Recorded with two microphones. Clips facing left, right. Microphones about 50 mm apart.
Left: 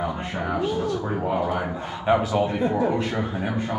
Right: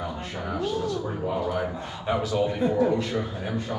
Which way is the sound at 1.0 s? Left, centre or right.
Left.